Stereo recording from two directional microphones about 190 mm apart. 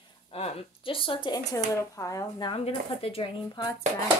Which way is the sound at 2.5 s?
30° left (ahead or behind).